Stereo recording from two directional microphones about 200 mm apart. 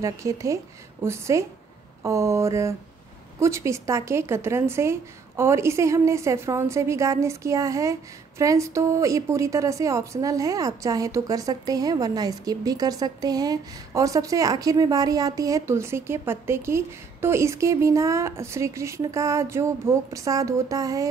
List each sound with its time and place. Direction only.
0.0 s a woman's voice: 15° right (ahead or behind)